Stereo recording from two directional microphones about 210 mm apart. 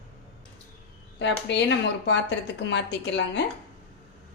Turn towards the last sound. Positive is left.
turn(degrees=55)  # may be behind; listen again after turning